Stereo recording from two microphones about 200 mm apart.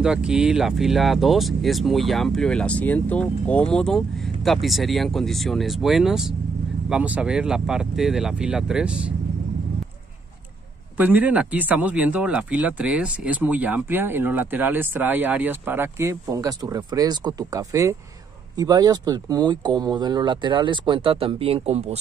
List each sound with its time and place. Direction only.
0.0 s speech: 5° right (ahead or behind)
11.0 s speech: 10° right (ahead or behind); by 21.9 s 30° right (ahead or behind)